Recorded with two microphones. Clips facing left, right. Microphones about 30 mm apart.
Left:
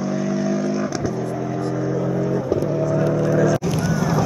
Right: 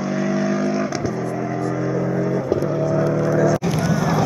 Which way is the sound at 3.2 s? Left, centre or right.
Centre.